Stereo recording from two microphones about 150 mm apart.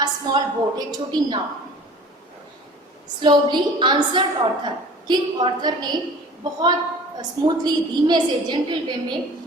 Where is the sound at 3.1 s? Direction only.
30° right (ahead or behind).